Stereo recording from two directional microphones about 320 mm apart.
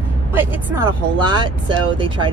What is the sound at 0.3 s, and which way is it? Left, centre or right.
Speech, centre.